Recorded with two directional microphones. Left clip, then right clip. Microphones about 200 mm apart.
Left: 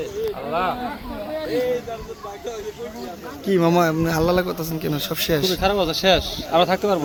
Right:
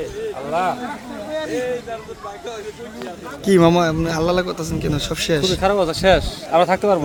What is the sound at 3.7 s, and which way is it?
A man's voice, 5° left (ahead or behind).